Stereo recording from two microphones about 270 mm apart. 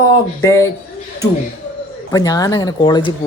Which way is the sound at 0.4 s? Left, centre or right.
Centre.